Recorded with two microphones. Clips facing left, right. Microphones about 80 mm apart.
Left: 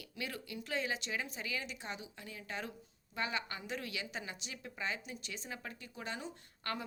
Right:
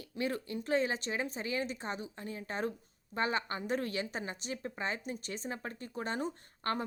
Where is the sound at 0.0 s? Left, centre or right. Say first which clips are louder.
Right 8 dB; right.